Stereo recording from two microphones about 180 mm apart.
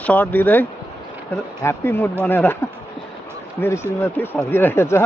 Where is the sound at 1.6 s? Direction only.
10° left (ahead or behind).